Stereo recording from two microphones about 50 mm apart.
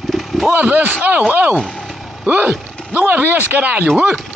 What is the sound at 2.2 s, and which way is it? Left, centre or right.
Speech, right.